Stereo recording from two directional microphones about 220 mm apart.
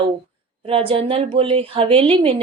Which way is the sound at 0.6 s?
25° right (ahead or behind).